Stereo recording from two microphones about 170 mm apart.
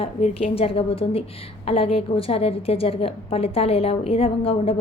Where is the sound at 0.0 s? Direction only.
35° left (ahead or behind).